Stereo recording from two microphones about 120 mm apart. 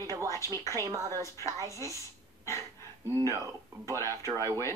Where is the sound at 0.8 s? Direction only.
30° right (ahead or behind).